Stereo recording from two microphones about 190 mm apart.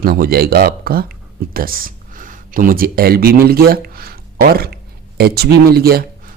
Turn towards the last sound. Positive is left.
turn(degrees=-55)  # may be behind; listen again after turning